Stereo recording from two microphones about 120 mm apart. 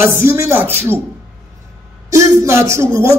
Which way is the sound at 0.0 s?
20° right (ahead or behind).